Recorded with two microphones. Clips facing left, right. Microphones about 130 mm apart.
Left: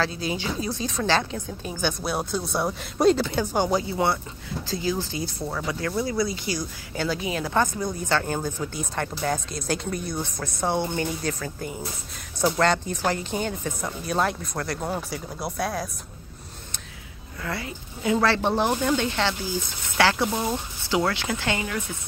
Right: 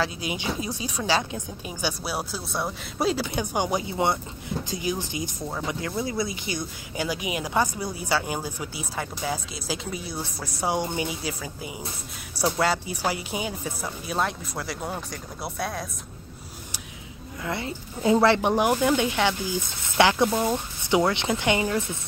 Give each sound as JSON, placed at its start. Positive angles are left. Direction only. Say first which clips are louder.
{"t": 0.0, "sound": "speech", "louder": "left 1 dB", "side_deg": -15}
{"t": 3.3, "sound": "speech", "louder": "left 3 dB", "side_deg": -15}
{"t": 17.4, "sound": "speech", "louder": "right 1 dB", "side_deg": -20}